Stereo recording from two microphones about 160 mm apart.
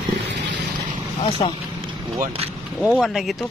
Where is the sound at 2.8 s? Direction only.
Centre (ahead or behind).